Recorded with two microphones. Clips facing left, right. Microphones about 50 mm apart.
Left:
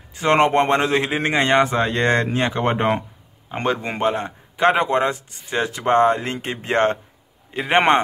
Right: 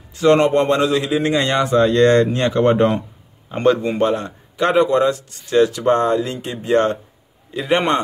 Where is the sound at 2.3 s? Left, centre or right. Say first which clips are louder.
Right 5 dB; centre.